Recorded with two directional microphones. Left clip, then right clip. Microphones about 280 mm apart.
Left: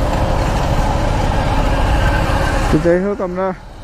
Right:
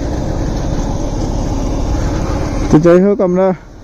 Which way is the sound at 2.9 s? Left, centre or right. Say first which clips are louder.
Right 7 dB; centre.